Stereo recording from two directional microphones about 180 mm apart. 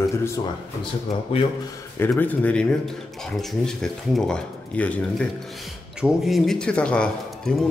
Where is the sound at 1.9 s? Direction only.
10° left (ahead or behind).